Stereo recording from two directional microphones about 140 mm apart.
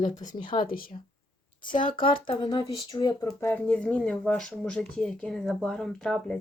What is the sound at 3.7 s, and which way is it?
Speech, 10° left (ahead or behind).